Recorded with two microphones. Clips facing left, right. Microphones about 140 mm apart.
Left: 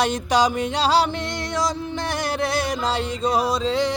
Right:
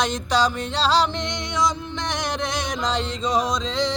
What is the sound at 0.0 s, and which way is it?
Music, 10° left (ahead or behind).